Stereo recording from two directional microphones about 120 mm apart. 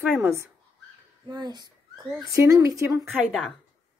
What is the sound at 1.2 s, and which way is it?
Speech, 35° right (ahead or behind).